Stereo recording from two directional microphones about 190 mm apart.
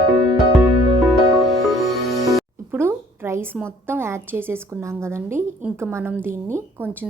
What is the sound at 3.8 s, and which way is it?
A woman's voice, 10° right (ahead or behind).